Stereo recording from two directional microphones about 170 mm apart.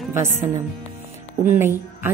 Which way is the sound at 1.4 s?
10° right (ahead or behind).